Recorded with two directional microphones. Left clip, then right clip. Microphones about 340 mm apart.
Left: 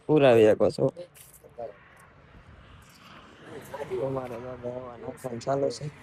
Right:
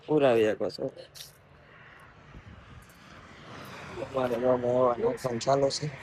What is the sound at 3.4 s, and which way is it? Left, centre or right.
Vehicle, centre.